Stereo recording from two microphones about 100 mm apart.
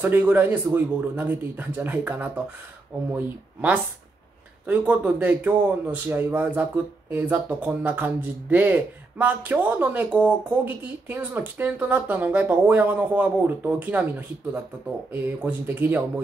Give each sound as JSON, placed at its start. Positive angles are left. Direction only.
{"t": 0.0, "sound": "a man's voice", "side_deg": -20}